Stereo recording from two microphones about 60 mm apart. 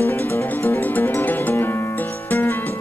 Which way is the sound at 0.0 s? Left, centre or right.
Left.